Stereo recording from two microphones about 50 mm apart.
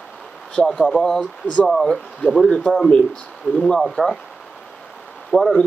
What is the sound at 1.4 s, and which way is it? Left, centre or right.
Speech, left.